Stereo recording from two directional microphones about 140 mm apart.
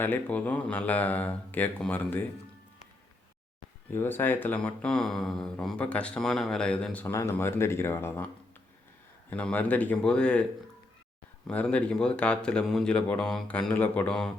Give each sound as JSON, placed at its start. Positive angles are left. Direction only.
{"t": 0.0, "sound": "speech", "side_deg": 10}
{"t": 3.9, "sound": "speech", "side_deg": 15}
{"t": 9.3, "sound": "speech", "side_deg": 10}
{"t": 11.4, "sound": "speech", "side_deg": 10}